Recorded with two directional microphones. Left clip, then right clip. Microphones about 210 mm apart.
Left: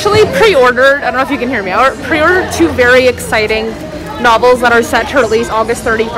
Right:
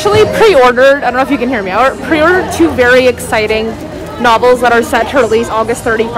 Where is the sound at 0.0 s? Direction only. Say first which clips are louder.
Right 1 dB; 10° right (ahead or behind).